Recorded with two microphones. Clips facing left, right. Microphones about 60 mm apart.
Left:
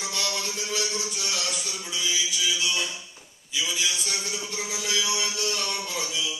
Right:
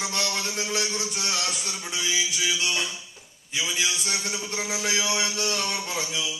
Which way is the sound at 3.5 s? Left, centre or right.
Right.